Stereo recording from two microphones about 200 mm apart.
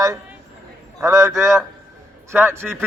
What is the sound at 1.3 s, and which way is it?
A man's voice, centre (ahead or behind).